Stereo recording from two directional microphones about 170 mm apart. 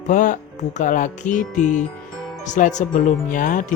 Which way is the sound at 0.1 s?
50° left (ahead or behind).